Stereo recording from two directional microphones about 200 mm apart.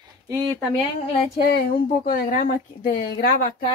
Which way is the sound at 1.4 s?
45° left (ahead or behind).